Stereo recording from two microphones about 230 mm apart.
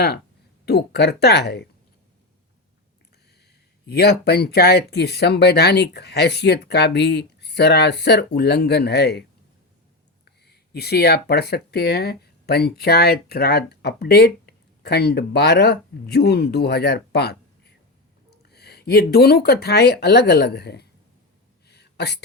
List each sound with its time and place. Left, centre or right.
0.6 s speech: left
3.8 s speech: left
10.2 s speech: left
18.4 s speech: left
21.7 s a sound: left